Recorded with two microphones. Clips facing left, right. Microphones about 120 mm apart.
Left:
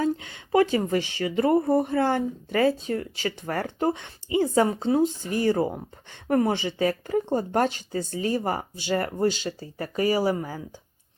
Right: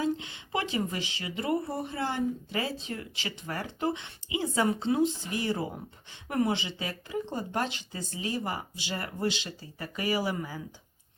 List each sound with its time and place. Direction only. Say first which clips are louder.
0.0 s speech: left 4 dB; 45° left (ahead or behind)